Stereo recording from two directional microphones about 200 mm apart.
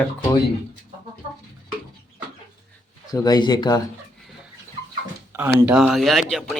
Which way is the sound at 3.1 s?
20° left (ahead or behind).